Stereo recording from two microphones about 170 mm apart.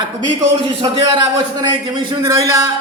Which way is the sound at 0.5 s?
30° right (ahead or behind).